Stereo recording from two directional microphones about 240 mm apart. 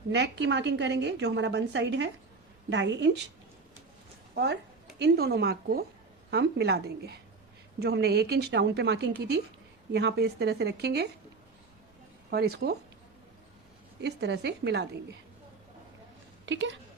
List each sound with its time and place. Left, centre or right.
0.1 s a woman's voice: right
4.9 s a woman's voice: right
12.3 s speech: right
14.0 s a woman's voice: right
16.5 s a woman's voice: right